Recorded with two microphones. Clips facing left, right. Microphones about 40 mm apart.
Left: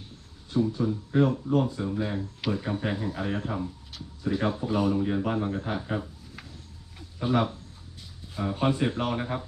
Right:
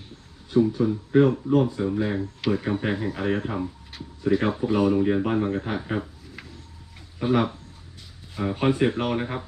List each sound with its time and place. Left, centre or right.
0.7 s speech: centre
7.2 s speech: centre